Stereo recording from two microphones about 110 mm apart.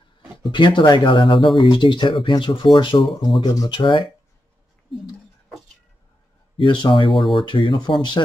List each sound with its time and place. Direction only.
0.4 s speech: 50° left (ahead or behind)
6.5 s speech: 45° left (ahead or behind)
7.1 s speech: centre (ahead or behind)
7.3 s speech: 50° left (ahead or behind)